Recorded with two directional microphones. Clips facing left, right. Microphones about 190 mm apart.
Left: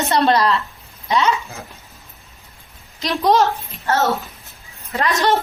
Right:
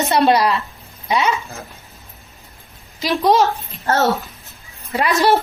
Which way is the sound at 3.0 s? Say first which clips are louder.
Right 1 dB; centre (ahead or behind).